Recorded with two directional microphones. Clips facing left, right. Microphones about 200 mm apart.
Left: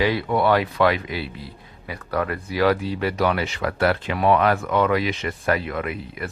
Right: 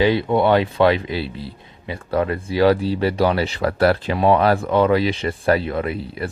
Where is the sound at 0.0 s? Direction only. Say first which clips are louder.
Right 4 dB; 25° right (ahead or behind).